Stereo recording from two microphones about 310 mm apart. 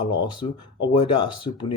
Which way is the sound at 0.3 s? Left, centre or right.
Centre.